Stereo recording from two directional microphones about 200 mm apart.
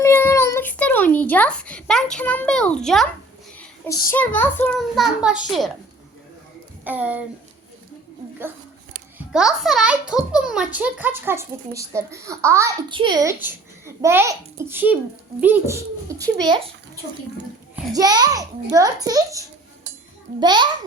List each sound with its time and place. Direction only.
0.0 s a sound: 10° left (ahead or behind)
2.1 s a child's voice: 10° left (ahead or behind)
3.8 s a child's voice: 15° left (ahead or behind)
5.2 s a child's voice: 5° right (ahead or behind)
6.8 s a child's voice: 5° right (ahead or behind)
9.1 s a child's voice: 5° right (ahead or behind)
12.9 s a child's voice: 25° right (ahead or behind)
17.9 s a child's voice: 20° right (ahead or behind)